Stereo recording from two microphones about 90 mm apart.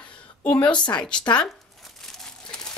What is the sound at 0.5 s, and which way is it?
Speech, 60° left (ahead or behind).